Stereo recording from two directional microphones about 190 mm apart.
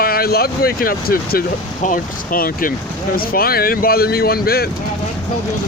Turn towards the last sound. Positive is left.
turn(degrees=55)  # may be behind; listen again after turning